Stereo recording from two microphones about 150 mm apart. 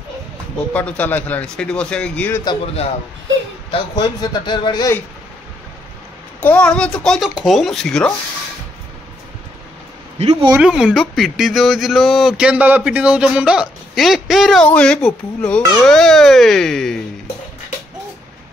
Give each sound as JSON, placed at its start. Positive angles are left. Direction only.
{"t": 0.7, "sound": "a man's voice", "side_deg": 10}
{"t": 3.7, "sound": "a man's voice", "side_deg": 30}
{"t": 6.4, "sound": "speech", "side_deg": 10}
{"t": 10.6, "sound": "speech", "side_deg": -5}